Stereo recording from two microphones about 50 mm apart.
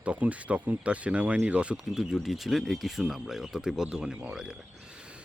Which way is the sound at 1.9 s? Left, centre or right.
Centre.